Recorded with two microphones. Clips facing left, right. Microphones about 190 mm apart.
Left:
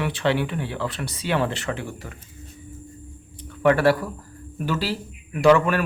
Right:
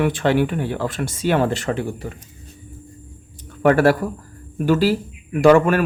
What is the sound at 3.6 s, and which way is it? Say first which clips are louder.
Speech: right 3 dB; 45° right (ahead or behind).